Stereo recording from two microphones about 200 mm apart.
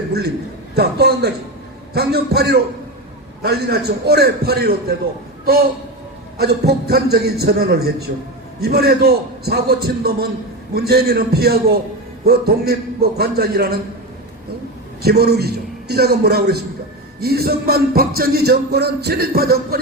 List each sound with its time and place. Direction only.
0.8 s speech: 50° right (ahead or behind)
6.4 s speech: 50° right (ahead or behind)
15.0 s speech: 50° right (ahead or behind)